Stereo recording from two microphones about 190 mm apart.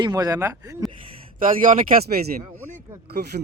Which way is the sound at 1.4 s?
45° right (ahead or behind).